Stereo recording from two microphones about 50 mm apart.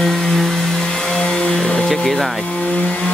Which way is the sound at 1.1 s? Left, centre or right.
Centre.